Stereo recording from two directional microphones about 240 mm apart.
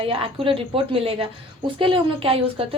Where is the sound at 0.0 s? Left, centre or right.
Right.